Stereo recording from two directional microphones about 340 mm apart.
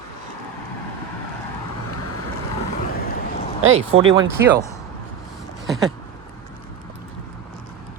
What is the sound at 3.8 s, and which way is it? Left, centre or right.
Speech, centre.